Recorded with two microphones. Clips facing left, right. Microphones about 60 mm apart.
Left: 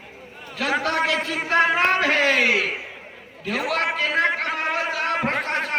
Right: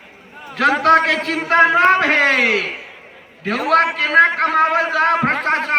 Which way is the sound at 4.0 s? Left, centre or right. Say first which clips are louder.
Right 8 dB; right.